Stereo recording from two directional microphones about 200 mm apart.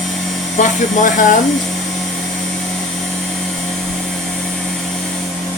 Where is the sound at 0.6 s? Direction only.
40° left (ahead or behind).